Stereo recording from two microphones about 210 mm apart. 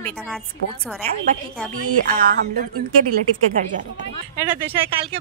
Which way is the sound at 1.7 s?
40° right (ahead or behind).